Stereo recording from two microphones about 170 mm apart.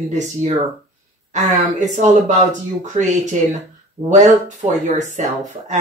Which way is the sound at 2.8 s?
45° right (ahead or behind).